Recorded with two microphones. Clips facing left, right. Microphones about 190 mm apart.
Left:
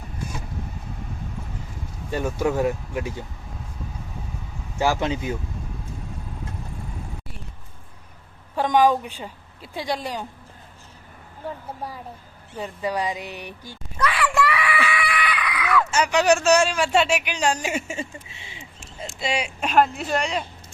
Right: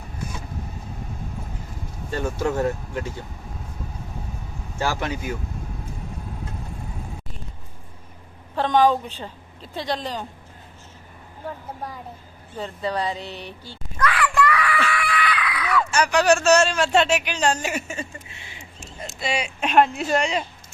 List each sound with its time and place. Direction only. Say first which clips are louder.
2.0 s a man's voice: left 1 dB; 15° left (ahead or behind)
4.8 s speech: left 3 dB; 20° left (ahead or behind)
8.5 s a man's voice: even; 10° left (ahead or behind)
11.4 s a man's voice: left 1 dB; 10° left (ahead or behind)
14.6 s screaming: even; 10° left (ahead or behind)
15.9 s a man's voice: right 1 dB; 20° left (ahead or behind)
17.7 s speech: left 1 dB; 25° left (ahead or behind)
19.5 s speech: right 2 dB; centre (ahead or behind)